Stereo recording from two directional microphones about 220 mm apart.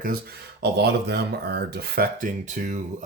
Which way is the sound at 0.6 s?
50° right (ahead or behind).